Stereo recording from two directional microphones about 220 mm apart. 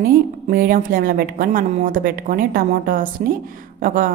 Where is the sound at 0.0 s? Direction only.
40° right (ahead or behind).